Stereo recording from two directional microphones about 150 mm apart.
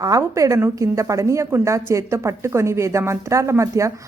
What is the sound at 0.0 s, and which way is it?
A woman's voice, 20° right (ahead or behind).